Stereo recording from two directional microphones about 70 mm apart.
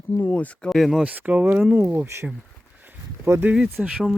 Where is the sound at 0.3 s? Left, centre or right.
Centre.